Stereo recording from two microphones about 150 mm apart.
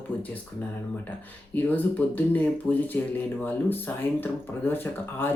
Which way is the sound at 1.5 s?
10° left (ahead or behind).